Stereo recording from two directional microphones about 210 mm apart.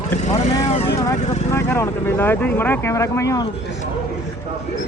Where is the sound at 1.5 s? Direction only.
10° left (ahead or behind).